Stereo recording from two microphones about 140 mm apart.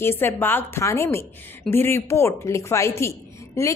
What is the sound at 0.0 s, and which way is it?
A woman's voice, 15° left (ahead or behind).